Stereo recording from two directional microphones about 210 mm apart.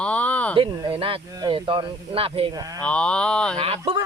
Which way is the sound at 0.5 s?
25° right (ahead or behind).